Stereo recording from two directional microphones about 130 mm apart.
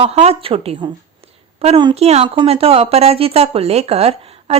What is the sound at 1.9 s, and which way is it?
Speech, 55° right (ahead or behind).